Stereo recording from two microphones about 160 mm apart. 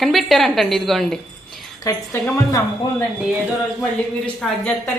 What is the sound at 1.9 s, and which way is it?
Speech, 20° left (ahead or behind).